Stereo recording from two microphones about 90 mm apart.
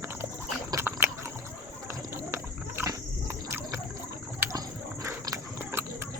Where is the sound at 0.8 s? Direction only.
25° right (ahead or behind).